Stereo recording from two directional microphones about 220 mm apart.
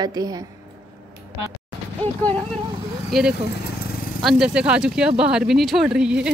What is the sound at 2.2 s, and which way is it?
A woman's voice, 5° left (ahead or behind).